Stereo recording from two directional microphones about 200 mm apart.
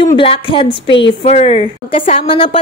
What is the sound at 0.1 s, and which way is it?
A woman's voice, 25° left (ahead or behind).